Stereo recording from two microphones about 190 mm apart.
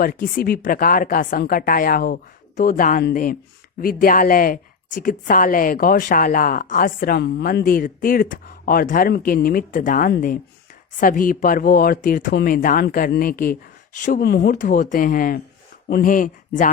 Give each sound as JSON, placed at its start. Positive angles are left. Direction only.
{"t": 0.0, "sound": "a woman's voice", "side_deg": 50}
{"t": 14.5, "sound": "a woman's voice", "side_deg": 45}